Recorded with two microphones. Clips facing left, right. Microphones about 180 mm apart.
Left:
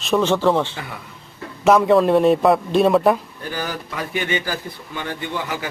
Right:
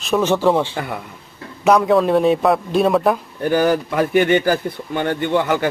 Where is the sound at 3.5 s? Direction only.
55° right (ahead or behind).